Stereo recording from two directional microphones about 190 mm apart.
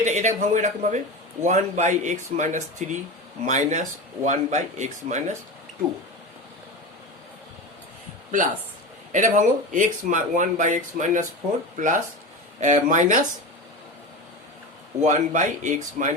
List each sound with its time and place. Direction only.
0.0 s a man's voice: 40° right (ahead or behind)
9.1 s a man's voice: 40° right (ahead or behind)
15.0 s a man's voice: 40° right (ahead or behind)